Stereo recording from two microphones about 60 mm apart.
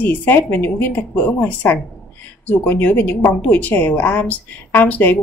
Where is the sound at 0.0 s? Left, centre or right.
Left.